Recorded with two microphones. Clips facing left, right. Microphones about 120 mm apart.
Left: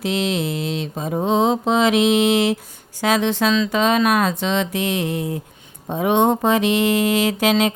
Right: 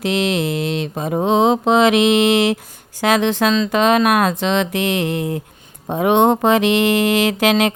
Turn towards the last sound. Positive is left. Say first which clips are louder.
# right 2 dB
turn(degrees=-70)  # may be behind; listen again after turning